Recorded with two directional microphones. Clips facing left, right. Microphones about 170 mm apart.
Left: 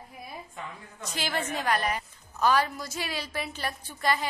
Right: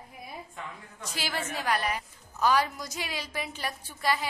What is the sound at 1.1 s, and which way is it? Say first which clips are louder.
A woman's voice: left 3 dB; 5° right (ahead or behind).